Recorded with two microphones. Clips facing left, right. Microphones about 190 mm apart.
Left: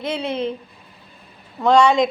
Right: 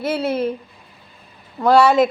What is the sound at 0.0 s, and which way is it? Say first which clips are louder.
Speech: right 3 dB; 5° right (ahead or behind).